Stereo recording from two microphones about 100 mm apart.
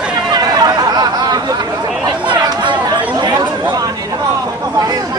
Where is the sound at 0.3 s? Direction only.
45° right (ahead or behind).